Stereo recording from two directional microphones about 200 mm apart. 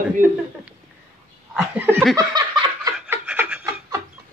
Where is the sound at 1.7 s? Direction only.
10° right (ahead or behind).